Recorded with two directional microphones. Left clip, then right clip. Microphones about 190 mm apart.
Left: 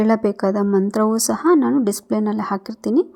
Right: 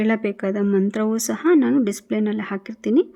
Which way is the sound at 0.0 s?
15° right (ahead or behind).